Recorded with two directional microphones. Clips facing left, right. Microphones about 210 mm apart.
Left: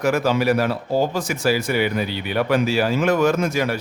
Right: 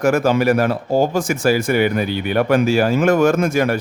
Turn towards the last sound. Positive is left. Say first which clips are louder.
# right 4 dB
turn(degrees=-50)  # may be behind; listen again after turning